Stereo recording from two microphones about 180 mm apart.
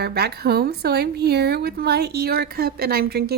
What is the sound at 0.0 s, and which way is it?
A woman's voice, 60° right (ahead or behind).